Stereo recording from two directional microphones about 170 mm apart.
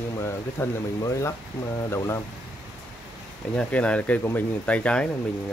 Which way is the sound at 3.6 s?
5° left (ahead or behind).